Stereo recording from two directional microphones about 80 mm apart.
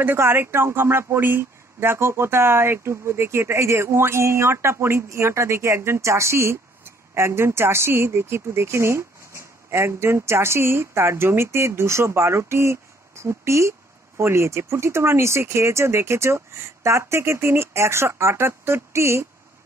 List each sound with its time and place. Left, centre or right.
0.0 s speech: right